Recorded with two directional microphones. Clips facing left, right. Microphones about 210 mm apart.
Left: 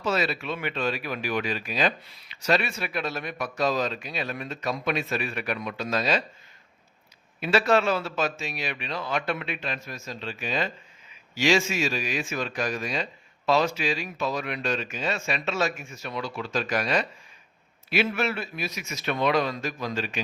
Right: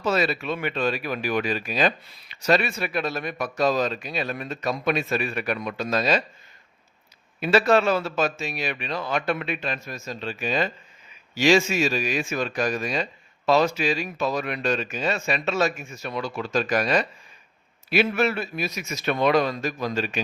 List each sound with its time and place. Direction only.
0.0 s speech: 45° right (ahead or behind)
7.3 s speech: 45° right (ahead or behind)